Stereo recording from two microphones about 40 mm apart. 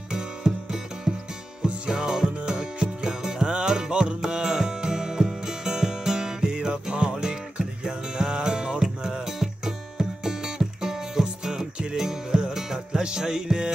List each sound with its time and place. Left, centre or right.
0.1 s music: centre